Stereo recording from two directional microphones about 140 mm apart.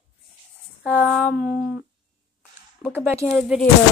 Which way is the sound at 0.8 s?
5° left (ahead or behind).